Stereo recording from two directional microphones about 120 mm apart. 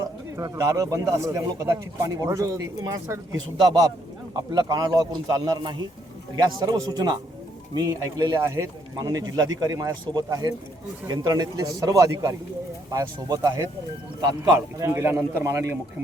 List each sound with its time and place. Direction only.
0.0 s speech: 25° right (ahead or behind)
4.4 s a man's voice: 35° right (ahead or behind)
8.4 s speech: 25° right (ahead or behind)
9.0 s a man's voice: 35° right (ahead or behind)